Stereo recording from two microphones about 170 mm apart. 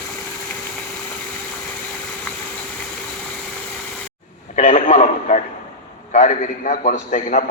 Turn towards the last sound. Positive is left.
turn(degrees=45)  # may be behind; listen again after turning